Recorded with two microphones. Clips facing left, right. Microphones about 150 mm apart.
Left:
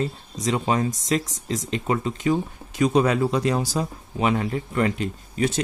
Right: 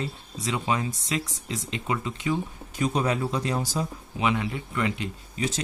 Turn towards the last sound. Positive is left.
turn(degrees=40)  # may be behind; listen again after turning